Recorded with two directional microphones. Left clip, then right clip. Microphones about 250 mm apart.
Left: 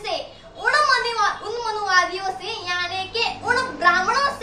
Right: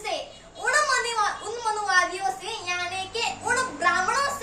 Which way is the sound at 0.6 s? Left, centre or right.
Centre.